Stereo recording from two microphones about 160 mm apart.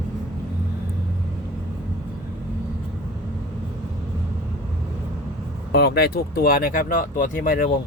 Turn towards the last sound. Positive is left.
turn(degrees=60)  # may be behind; listen again after turning